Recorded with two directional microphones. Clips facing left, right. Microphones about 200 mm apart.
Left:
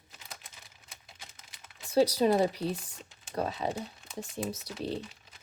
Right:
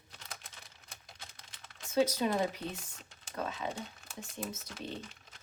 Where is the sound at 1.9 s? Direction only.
35° left (ahead or behind).